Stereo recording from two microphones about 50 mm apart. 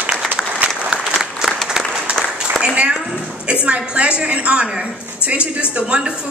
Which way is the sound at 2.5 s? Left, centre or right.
Right.